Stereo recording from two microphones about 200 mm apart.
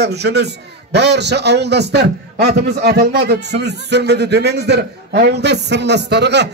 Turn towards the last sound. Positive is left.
turn(degrees=-55)  # may be behind; listen again after turning